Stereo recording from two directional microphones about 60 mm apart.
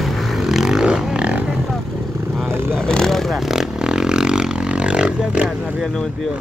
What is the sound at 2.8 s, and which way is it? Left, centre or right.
Vehicle, centre.